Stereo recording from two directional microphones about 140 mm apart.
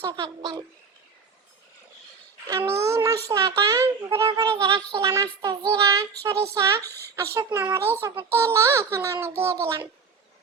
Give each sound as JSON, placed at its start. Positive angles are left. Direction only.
{"t": 0.0, "sound": "speech", "side_deg": -30}
{"t": 2.5, "sound": "speech", "side_deg": -20}
{"t": 4.5, "sound": "speech", "side_deg": -30}